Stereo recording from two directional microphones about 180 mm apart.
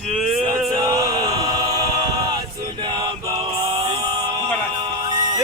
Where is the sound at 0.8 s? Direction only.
20° right (ahead or behind).